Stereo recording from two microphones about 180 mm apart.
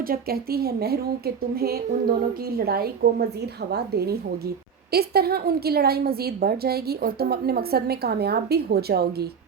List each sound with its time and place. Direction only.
0.0 s a woman's voice: 55° right (ahead or behind)